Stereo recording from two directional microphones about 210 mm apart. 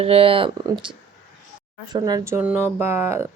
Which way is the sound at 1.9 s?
20° right (ahead or behind).